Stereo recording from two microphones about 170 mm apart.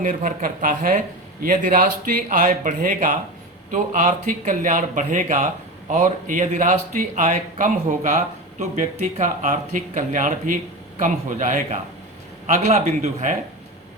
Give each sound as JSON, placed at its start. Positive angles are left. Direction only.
{"t": 0.0, "sound": "speech", "side_deg": -50}